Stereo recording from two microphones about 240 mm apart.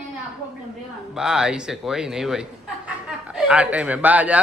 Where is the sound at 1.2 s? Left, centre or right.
Centre.